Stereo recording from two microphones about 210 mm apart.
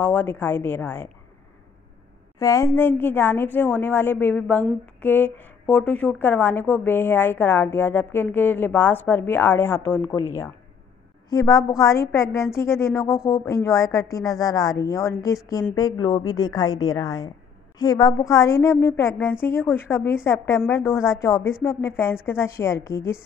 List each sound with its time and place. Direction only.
0.0 s a woman's voice: 10° left (ahead or behind)
2.3 s a woman's voice: 15° left (ahead or behind)
11.2 s a woman's voice: 15° left (ahead or behind)